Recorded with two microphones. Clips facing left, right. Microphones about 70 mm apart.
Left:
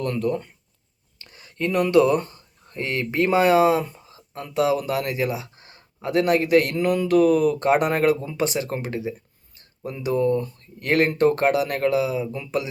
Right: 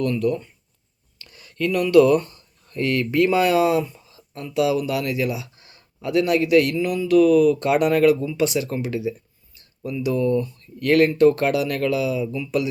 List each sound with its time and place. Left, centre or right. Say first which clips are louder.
0.0 s speech: right 2 dB; left
6.7 s speech: right 1 dB; left